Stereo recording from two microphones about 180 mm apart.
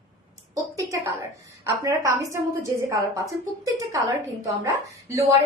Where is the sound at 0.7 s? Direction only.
20° right (ahead or behind).